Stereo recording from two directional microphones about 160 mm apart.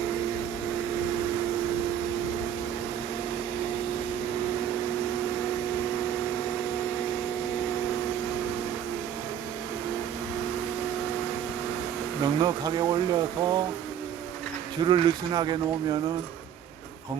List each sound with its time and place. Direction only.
12.2 s speech: 25° right (ahead or behind)
14.8 s speech: 25° right (ahead or behind)